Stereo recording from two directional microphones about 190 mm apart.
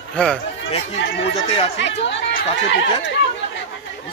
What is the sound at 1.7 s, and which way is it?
Speech, 70° left (ahead or behind).